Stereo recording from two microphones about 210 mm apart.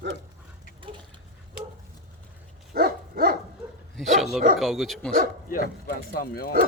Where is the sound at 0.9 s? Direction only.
25° right (ahead or behind).